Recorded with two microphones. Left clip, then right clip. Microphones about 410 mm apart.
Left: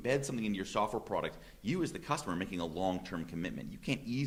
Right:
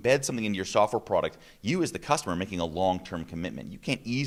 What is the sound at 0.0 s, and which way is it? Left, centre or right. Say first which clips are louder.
Speech: right 9 dB; right.